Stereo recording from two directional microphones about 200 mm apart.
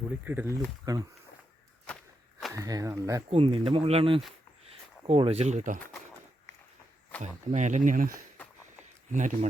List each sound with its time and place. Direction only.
0.3 s speech: 10° right (ahead or behind)
1.9 s walk: 5° left (ahead or behind)
2.5 s speech: 15° right (ahead or behind)
3.2 s speech: 25° right (ahead or behind)
7.2 s speech: 35° right (ahead or behind)
9.1 s speech: 40° right (ahead or behind)